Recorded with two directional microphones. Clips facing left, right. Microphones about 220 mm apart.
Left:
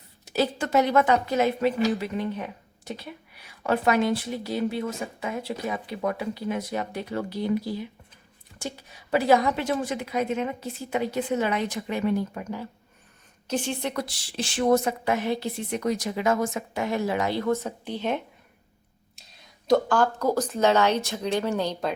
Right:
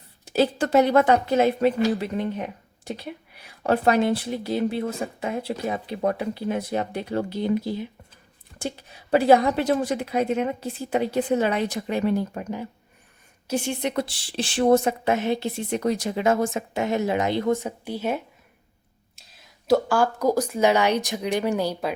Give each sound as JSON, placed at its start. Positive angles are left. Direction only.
{"t": 0.3, "sound": "speech", "side_deg": -30}
{"t": 2.4, "sound": "a sound", "side_deg": -25}
{"t": 3.6, "sound": "a woman's voice", "side_deg": -35}
{"t": 9.0, "sound": "speech", "side_deg": -30}
{"t": 13.5, "sound": "a woman's voice", "side_deg": -10}
{"t": 13.9, "sound": "a woman's voice", "side_deg": -30}